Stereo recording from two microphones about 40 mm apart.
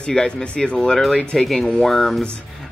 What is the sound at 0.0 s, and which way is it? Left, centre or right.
Speech, centre.